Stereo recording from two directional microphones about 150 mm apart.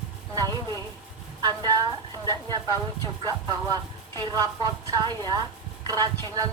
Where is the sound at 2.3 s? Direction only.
25° right (ahead or behind).